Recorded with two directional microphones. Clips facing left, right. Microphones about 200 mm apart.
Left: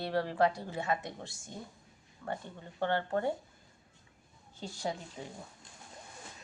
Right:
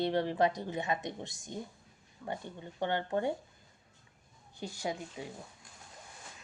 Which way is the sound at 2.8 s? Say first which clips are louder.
Left 1 dB; 15° right (ahead or behind).